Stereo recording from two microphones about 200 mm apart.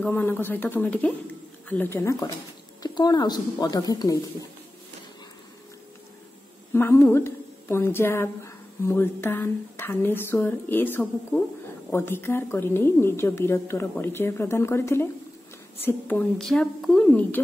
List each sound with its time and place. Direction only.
0.0 s a woman's voice: 10° left (ahead or behind)
6.7 s a woman's voice: 10° left (ahead or behind)